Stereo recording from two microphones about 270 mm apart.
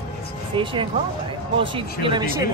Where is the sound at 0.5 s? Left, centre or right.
Centre.